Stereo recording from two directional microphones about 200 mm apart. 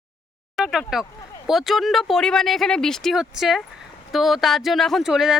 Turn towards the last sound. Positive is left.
turn(degrees=0)  # may be behind; listen again after turning